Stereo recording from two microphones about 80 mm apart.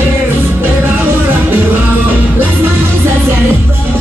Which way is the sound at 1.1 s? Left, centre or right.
Right.